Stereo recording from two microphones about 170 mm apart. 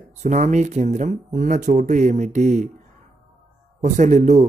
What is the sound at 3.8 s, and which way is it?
Speech, 45° right (ahead or behind).